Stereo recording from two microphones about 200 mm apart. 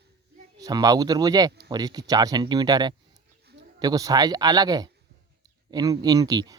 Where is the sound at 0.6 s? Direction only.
20° right (ahead or behind).